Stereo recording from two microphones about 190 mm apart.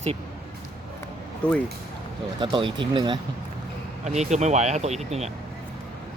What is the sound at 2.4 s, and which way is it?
Speech, 25° right (ahead or behind).